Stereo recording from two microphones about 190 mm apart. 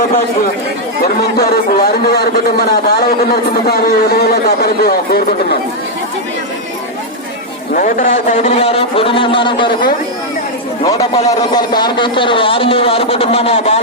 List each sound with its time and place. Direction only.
1.0 s a man's voice: 55° left (ahead or behind)
7.7 s a man's voice: 45° left (ahead or behind); by 9.9 s 25° left (ahead or behind)
11.3 s speech: 20° left (ahead or behind)